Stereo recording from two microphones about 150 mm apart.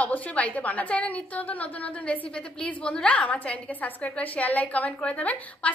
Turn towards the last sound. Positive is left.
turn(degrees=10)  # may be behind; listen again after turning